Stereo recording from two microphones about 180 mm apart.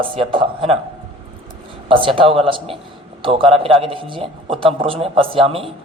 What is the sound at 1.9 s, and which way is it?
A man's voice, 30° right (ahead or behind).